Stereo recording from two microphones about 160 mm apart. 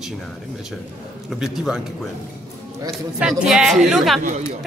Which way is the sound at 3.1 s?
5° right (ahead or behind).